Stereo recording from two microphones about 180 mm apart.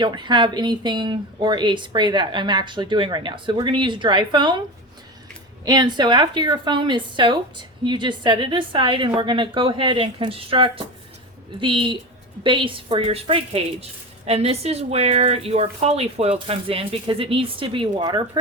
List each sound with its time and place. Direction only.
0.0 s a woman's voice: 25° right (ahead or behind)
5.6 s a woman's voice: 25° right (ahead or behind)